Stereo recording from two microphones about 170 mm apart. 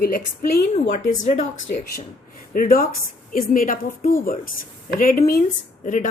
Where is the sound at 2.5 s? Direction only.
55° left (ahead or behind).